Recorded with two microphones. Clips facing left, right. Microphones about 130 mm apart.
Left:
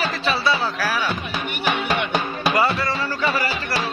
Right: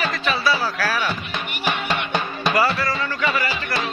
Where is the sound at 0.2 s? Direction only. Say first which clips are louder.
Even; 30° left (ahead or behind).